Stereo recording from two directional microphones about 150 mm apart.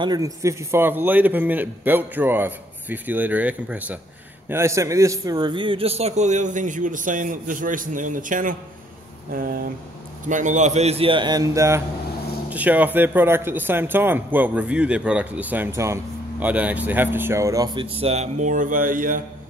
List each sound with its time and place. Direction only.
0.0 s a man's voice: 25° right (ahead or behind); by 8.5 s 60° right (ahead or behind)
9.3 s speech: 70° right (ahead or behind)
10.2 s a man's voice: 55° right (ahead or behind); by 17.6 s 20° right (ahead or behind)
18.0 s a man's voice: 45° right (ahead or behind); by 19.2 s 65° right (ahead or behind)